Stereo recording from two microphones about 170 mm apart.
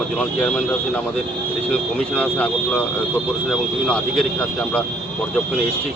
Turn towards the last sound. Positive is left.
turn(degrees=5)  # may be behind; listen again after turning